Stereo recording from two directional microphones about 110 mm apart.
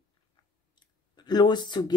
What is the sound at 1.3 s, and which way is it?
Speech, 40° left (ahead or behind).